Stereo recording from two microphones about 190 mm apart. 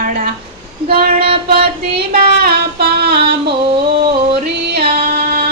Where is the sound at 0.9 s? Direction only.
55° right (ahead or behind).